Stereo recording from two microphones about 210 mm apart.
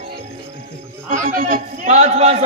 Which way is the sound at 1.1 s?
40° right (ahead or behind).